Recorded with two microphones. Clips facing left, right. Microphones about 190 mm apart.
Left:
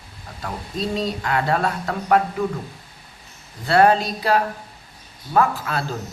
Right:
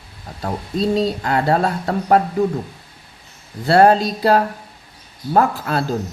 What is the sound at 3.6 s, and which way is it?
Speech, 35° right (ahead or behind).